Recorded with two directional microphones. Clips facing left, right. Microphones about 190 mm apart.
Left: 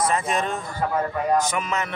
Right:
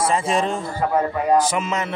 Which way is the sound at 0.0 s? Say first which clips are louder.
Right 3 dB; 30° right (ahead or behind).